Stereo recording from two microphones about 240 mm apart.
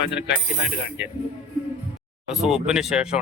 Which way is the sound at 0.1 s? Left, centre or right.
Left.